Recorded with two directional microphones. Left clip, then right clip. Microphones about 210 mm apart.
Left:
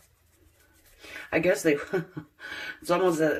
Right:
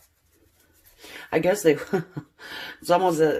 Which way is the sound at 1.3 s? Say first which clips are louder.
Right 3 dB; 45° right (ahead or behind).